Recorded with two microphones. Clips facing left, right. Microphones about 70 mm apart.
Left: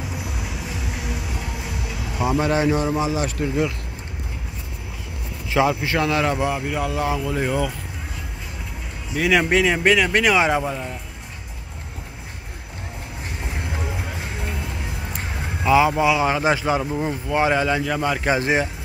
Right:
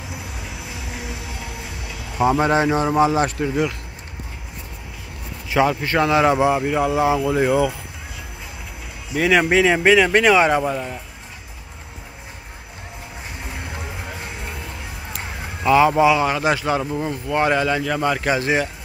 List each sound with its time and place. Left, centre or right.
2.2 s speech: right
5.7 s speech: centre
5.9 s speech: centre
6.2 s speech: centre
9.1 s speech: centre
15.6 s speech: centre
16.3 s speech: left; by 18.2 s centre
18.2 s speech: left